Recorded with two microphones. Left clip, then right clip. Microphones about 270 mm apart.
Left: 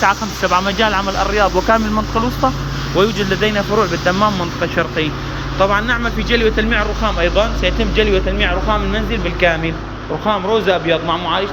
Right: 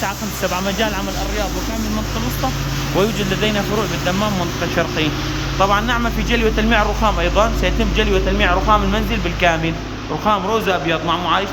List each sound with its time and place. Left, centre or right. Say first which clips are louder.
0.0 s speech: left 7 dB; centre
2.9 s speech: left 4 dB; centre